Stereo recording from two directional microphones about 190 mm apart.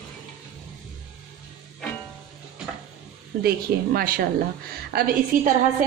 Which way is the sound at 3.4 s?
50° right (ahead or behind).